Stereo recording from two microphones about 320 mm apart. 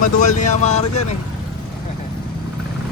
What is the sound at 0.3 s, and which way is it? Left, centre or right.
Speech, left.